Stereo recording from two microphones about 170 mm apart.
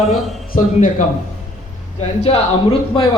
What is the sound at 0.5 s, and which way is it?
Speech, 50° left (ahead or behind).